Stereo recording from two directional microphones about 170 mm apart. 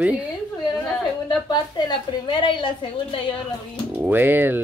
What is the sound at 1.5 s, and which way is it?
A woman's voice, 25° left (ahead or behind).